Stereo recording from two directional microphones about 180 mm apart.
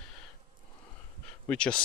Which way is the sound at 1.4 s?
5° left (ahead or behind).